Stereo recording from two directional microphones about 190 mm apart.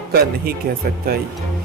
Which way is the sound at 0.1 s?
50° right (ahead or behind).